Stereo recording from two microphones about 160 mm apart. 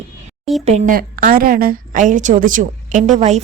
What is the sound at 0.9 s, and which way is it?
A woman's voice, 60° right (ahead or behind).